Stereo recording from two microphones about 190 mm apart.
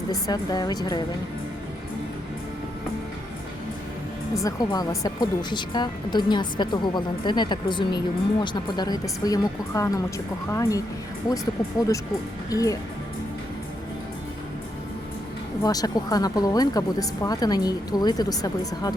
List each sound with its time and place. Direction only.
0.1 s a woman's voice: 20° left (ahead or behind)
4.4 s a woman's voice: 20° left (ahead or behind)
12.5 s speech: 20° left (ahead or behind)
15.6 s a woman's voice: 20° left (ahead or behind)